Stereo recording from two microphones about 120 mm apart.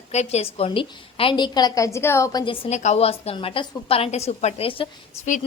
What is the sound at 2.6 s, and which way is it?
A woman's voice, 75° left (ahead or behind).